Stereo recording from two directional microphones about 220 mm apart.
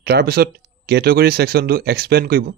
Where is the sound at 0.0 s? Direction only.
45° right (ahead or behind).